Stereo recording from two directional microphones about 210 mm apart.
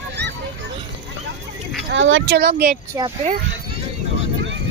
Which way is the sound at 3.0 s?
15° right (ahead or behind).